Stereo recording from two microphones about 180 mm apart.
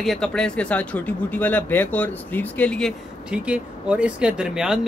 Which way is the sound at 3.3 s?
5° right (ahead or behind).